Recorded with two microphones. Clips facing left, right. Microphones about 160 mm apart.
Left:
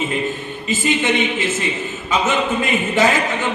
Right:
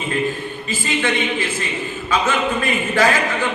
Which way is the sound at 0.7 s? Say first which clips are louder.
Left 3 dB; 20° left (ahead or behind).